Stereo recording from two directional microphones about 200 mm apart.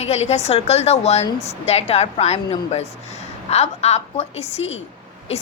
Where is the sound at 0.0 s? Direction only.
35° left (ahead or behind).